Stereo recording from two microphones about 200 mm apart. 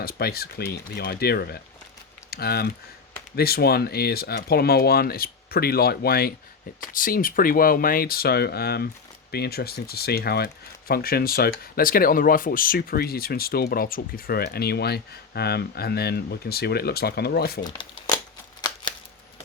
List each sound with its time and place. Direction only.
0.0 s speech: 50° left (ahead or behind)
17.6 s speech: 20° left (ahead or behind)